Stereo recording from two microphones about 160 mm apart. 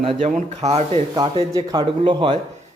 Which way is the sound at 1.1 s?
25° right (ahead or behind).